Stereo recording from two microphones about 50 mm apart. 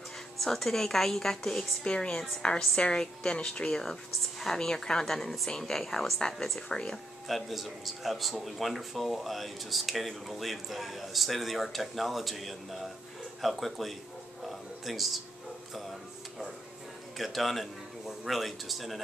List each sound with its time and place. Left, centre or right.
0.4 s a woman's voice: centre
7.2 s speech: centre
14.4 s a sound: centre
15.7 s music: centre
17.2 s speech: centre